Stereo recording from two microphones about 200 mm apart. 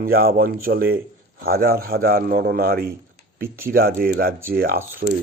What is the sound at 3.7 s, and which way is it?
Speech, 50° right (ahead or behind).